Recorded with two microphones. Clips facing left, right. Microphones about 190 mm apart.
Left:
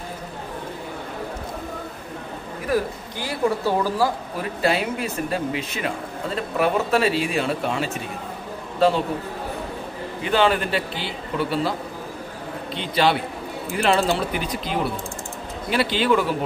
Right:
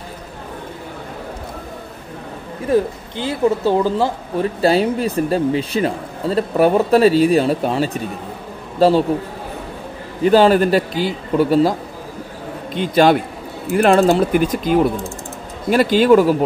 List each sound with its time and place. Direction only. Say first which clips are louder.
2.6 s a man's voice: right 6 dB; 25° right (ahead or behind)
10.2 s speech: right 9 dB; 40° right (ahead or behind)
12.7 s speech: right 8 dB; 45° right (ahead or behind)